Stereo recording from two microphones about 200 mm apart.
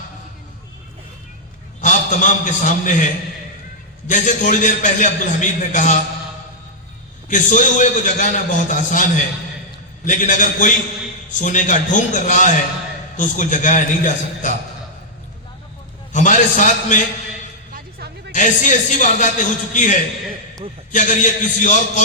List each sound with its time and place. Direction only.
1.8 s a man's voice: 40° left (ahead or behind)
4.0 s a man's voice: 40° left (ahead or behind)
7.3 s a man's voice: 40° left (ahead or behind)
16.1 s a man's voice: 40° left (ahead or behind)
18.3 s a man's voice: 40° left (ahead or behind)